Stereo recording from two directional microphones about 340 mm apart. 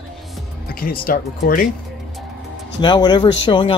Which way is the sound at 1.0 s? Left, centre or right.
Left.